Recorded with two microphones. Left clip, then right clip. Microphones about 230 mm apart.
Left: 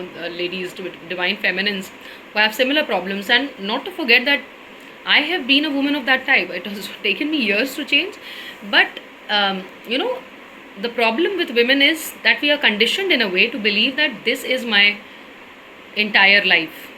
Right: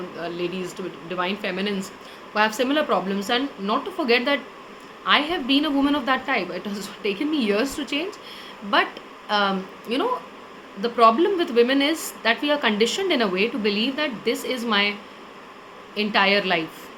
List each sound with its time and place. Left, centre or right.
0.2 s a woman's voice: centre
16.0 s a woman's voice: centre